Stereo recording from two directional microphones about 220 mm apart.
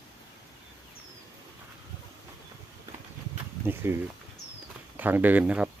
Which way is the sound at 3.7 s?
10° right (ahead or behind).